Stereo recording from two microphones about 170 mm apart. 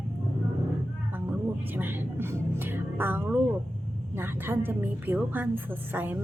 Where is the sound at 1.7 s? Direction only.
10° right (ahead or behind).